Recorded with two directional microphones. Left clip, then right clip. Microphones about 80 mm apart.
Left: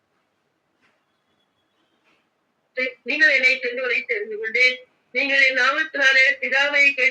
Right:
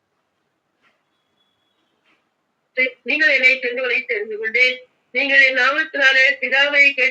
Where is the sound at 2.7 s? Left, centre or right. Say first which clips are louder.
Right 2 dB; right.